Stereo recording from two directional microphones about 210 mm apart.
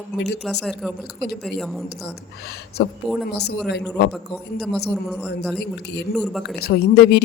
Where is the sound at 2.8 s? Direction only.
50° left (ahead or behind).